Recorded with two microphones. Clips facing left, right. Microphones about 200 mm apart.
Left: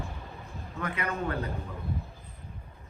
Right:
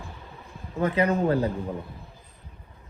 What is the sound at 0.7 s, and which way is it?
Speech, 30° right (ahead or behind).